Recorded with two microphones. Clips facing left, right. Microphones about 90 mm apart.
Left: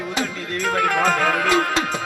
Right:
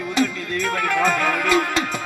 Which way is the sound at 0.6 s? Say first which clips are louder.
Left 2 dB; 25° left (ahead or behind).